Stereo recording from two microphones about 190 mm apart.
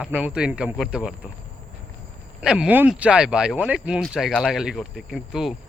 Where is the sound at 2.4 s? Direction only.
5° right (ahead or behind).